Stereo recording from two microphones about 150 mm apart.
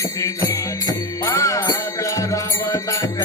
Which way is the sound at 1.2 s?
20° left (ahead or behind).